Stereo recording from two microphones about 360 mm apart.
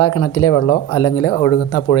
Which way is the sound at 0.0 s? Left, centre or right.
Left.